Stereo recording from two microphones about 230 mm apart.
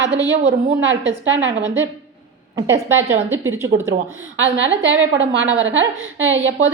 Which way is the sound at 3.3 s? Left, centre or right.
Centre.